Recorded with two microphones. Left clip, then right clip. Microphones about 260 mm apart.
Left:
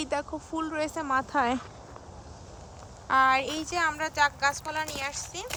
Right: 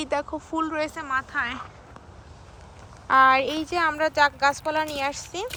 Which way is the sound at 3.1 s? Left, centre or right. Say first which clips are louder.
Right 5 dB; centre.